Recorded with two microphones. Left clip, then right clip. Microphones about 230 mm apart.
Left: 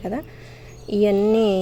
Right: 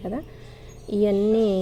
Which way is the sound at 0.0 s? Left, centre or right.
Centre.